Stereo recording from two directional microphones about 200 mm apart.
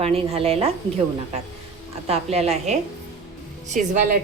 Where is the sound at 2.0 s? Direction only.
30° right (ahead or behind).